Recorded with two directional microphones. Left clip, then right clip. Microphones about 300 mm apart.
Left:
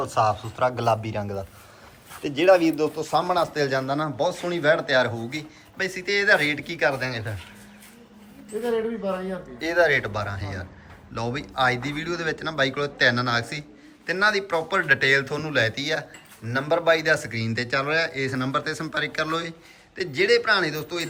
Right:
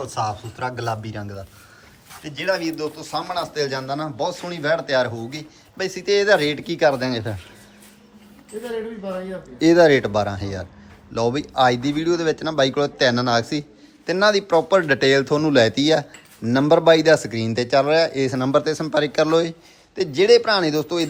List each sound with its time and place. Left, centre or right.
0.0 s speech: centre
1.2 s speech: left
2.2 s speech: centre
8.6 s speech: centre
9.6 s speech: centre